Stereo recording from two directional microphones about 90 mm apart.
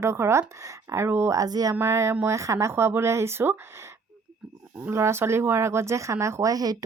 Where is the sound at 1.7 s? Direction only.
25° right (ahead or behind).